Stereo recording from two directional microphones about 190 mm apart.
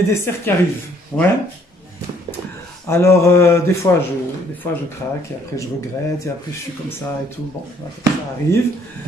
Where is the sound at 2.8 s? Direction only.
15° left (ahead or behind).